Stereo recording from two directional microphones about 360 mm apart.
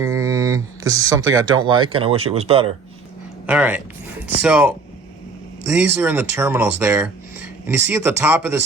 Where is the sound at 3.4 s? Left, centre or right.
Centre.